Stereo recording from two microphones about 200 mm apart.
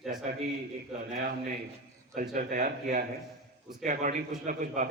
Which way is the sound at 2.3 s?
40° right (ahead or behind).